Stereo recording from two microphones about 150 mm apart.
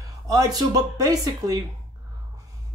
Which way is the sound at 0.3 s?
25° right (ahead or behind).